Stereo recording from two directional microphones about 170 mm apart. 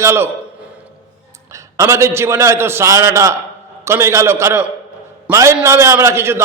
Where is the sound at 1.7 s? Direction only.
15° right (ahead or behind).